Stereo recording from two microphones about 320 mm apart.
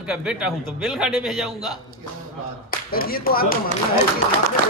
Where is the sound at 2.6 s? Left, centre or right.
Left.